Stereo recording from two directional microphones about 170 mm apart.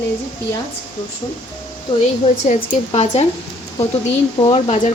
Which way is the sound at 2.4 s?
45° left (ahead or behind).